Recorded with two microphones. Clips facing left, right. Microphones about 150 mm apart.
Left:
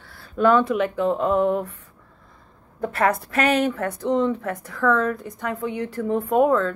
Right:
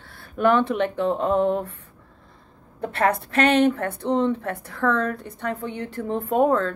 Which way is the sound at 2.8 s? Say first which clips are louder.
Left 1 dB; 30° right (ahead or behind).